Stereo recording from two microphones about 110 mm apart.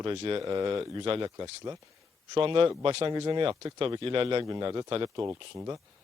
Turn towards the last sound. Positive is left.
turn(degrees=-25)  # may be behind; listen again after turning